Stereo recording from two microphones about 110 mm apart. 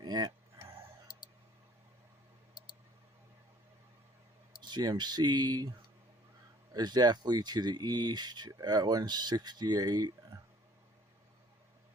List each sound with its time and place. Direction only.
0.0 s a sound: 40° right (ahead or behind)
4.6 s speech: 40° right (ahead or behind)
6.7 s speech: 40° right (ahead or behind)